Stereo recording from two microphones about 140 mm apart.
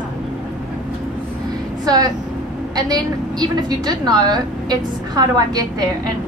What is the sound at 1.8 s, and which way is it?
A woman's voice, 30° right (ahead or behind).